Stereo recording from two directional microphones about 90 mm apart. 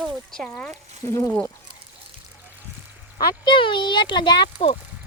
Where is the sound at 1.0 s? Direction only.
25° left (ahead or behind).